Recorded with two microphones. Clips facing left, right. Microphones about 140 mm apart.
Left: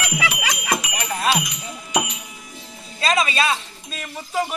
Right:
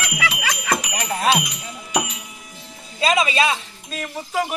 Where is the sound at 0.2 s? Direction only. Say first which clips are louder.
Even; 15° left (ahead or behind).